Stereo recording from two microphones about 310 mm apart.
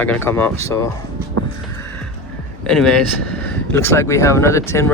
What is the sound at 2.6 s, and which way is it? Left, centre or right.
Speech, centre.